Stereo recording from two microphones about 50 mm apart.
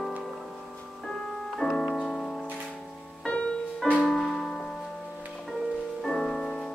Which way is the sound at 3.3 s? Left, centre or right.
Left.